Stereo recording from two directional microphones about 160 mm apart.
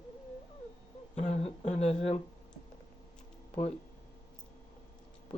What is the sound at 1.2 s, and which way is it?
Speech, 40° left (ahead or behind).